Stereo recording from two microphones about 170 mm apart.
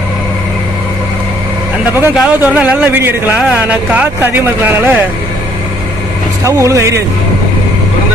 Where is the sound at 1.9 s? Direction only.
10° right (ahead or behind).